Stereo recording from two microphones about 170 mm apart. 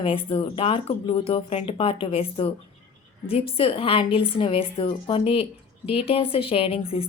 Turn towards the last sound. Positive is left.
turn(degrees=35)  # may be behind; listen again after turning